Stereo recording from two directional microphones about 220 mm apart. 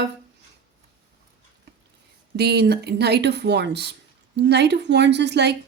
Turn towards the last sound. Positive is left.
turn(degrees=-50)  # may be behind; listen again after turning